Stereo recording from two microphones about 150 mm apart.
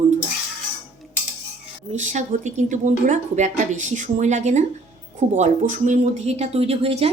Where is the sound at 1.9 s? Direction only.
55° right (ahead or behind).